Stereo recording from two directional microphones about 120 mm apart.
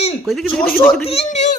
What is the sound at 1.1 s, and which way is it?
Speech, 65° left (ahead or behind).